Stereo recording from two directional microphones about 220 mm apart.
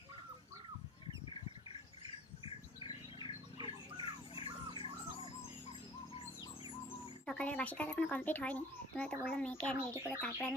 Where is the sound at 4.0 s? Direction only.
25° left (ahead or behind).